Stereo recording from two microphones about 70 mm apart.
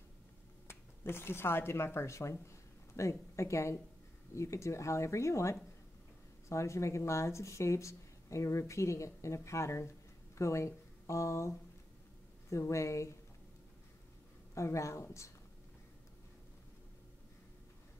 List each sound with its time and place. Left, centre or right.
0.7 s speech: left
14.5 s speech: left